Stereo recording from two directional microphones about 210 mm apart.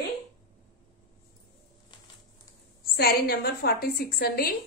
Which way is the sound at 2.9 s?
50° left (ahead or behind).